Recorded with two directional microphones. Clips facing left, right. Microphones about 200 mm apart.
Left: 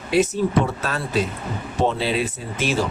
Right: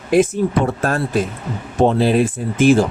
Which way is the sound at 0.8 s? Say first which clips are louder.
Right 5 dB; 50° right (ahead or behind).